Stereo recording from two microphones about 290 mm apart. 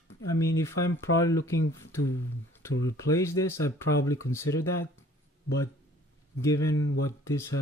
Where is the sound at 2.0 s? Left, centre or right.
Left.